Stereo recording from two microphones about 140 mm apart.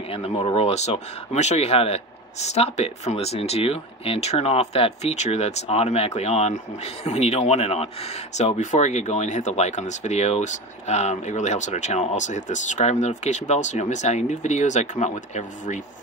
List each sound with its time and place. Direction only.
0.1 s speech: 40° left (ahead or behind)